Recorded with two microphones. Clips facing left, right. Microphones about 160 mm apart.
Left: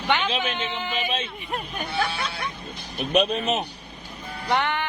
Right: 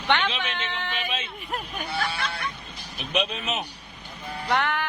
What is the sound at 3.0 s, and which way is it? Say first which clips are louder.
Speech: left 6 dB; 45° left (ahead or behind).